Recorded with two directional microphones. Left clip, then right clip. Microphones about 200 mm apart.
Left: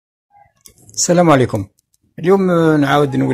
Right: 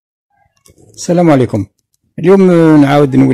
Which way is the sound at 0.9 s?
35° right (ahead or behind).